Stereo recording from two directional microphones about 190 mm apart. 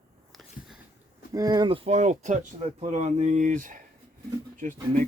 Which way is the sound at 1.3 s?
20° right (ahead or behind).